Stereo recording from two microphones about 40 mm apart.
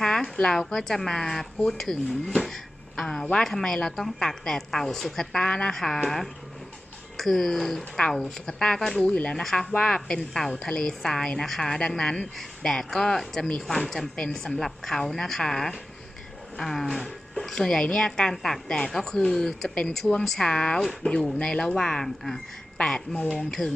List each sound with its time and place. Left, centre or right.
0.0 s a sound: centre
0.5 s a woman's voice: centre
5.4 s a woman's voice: left
5.7 s a woman's voice: centre
9.0 s a woman's voice: left
9.3 s a woman's voice: centre
9.7 s a woman's voice: left
10.2 s a woman's voice: centre
23.4 s a woman's voice: centre